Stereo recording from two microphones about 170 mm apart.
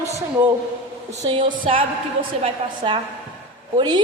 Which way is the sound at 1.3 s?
30° right (ahead or behind).